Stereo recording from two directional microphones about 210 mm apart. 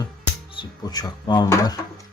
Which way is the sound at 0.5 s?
20° left (ahead or behind).